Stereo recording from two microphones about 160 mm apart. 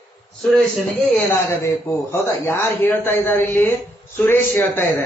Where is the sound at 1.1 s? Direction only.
15° left (ahead or behind).